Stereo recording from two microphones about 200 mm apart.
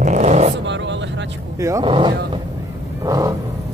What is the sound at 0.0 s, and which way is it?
Vehicle, 35° right (ahead or behind).